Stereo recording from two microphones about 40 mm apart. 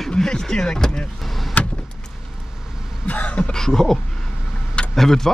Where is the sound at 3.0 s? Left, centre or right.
Left.